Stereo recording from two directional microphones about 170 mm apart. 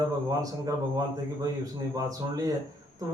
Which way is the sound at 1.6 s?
20° right (ahead or behind).